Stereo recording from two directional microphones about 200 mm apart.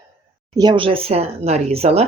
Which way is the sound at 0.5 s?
20° right (ahead or behind).